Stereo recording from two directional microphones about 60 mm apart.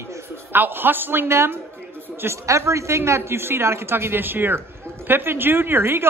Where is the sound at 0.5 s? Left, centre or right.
Right.